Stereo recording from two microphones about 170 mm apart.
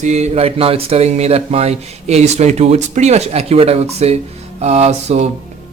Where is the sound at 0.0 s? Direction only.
40° right (ahead or behind).